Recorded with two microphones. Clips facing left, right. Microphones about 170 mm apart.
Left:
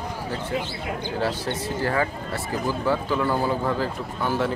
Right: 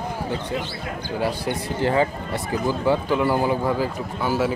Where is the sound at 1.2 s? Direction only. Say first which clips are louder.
Right 3 dB; 15° right (ahead or behind).